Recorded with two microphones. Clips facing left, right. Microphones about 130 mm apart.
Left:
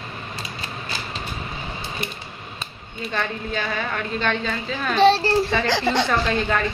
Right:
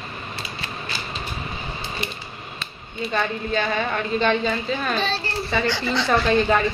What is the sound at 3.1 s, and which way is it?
A woman's voice, centre (ahead or behind).